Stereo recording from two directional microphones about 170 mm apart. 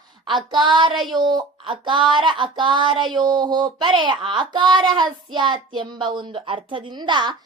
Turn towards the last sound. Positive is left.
turn(degrees=-25)  # may be behind; listen again after turning